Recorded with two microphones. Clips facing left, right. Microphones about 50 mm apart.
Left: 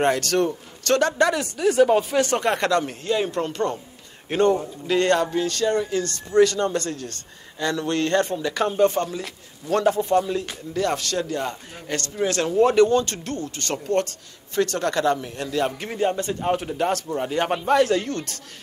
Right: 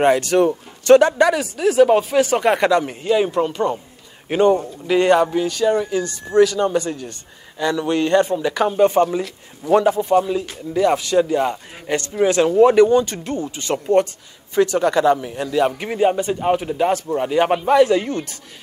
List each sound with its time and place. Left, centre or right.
0.0 s a man's voice: centre